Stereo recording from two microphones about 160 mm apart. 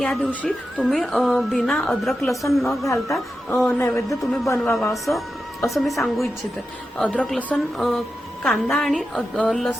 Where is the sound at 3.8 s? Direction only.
20° left (ahead or behind).